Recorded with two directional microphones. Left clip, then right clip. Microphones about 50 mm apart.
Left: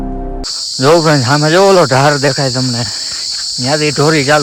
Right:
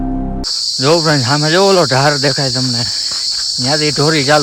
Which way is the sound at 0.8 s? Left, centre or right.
Right.